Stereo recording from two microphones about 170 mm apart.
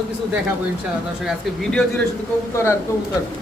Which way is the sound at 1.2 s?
5° left (ahead or behind).